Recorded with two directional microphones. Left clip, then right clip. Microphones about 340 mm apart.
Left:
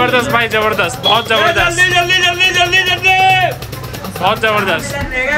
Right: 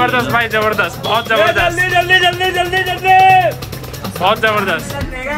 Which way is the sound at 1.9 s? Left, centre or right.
Right.